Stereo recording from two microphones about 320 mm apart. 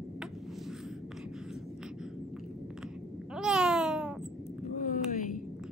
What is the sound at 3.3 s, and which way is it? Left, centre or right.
Babbling, centre.